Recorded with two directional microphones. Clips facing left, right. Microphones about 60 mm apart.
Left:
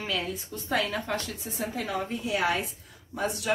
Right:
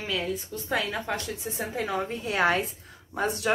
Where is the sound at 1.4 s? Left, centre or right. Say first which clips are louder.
Right 2 dB; right.